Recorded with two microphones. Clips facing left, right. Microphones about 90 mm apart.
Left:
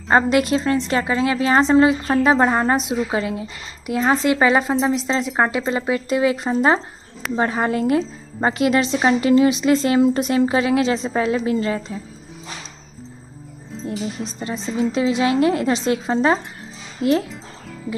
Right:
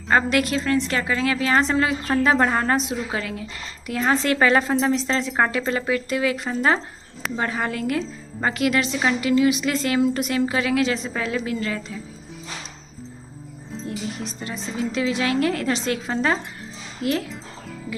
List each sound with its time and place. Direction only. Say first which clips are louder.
0.1 s a woman's voice: left 4 dB; 25° left (ahead or behind)
14.4 s a woman's voice: left 6 dB; 25° left (ahead or behind)